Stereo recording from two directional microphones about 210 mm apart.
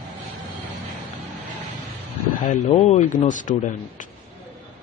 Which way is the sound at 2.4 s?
35° left (ahead or behind).